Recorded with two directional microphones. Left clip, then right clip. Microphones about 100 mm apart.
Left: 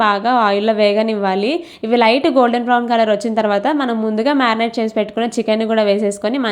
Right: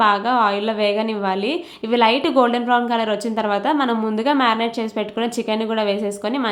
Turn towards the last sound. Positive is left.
turn(degrees=40)  # may be behind; listen again after turning